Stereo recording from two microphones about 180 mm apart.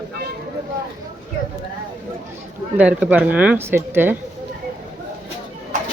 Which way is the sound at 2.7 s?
10° right (ahead or behind).